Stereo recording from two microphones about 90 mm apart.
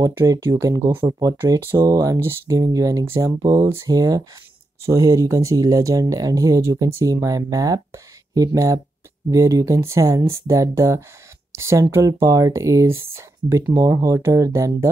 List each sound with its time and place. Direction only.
0.1 s speech: 35° right (ahead or behind)
2.1 s speech: 30° right (ahead or behind); by 3.6 s 45° right (ahead or behind)
3.6 s speech: 35° right (ahead or behind)